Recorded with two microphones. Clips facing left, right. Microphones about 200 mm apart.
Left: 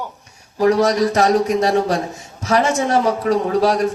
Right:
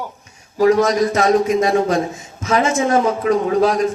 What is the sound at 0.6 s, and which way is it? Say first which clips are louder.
Speech: right 1 dB; 40° left (ahead or behind).